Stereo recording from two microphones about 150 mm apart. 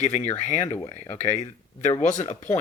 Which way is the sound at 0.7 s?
20° left (ahead or behind).